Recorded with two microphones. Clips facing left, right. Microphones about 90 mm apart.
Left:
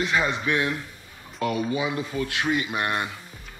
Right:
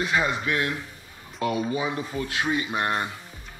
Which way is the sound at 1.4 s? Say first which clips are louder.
Even; 30° right (ahead or behind).